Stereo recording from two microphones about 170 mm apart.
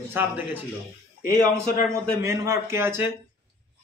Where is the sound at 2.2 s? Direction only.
15° right (ahead or behind).